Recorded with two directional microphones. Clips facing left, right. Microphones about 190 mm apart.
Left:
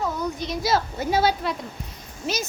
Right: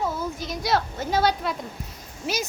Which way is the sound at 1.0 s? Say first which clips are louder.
Left 1 dB; 10° left (ahead or behind).